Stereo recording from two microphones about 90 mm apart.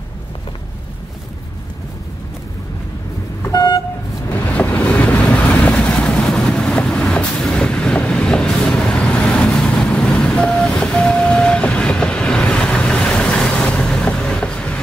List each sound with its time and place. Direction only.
3.4 s vehicle: 40° left (ahead or behind)
4.6 s vehicle: 15° left (ahead or behind)